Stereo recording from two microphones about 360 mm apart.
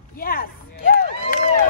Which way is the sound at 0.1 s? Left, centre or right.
Left.